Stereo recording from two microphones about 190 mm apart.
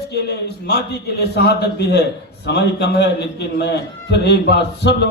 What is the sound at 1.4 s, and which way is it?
A man's voice, 60° left (ahead or behind).